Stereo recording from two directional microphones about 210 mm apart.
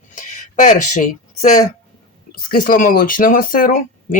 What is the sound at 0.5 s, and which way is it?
Speech, 35° left (ahead or behind).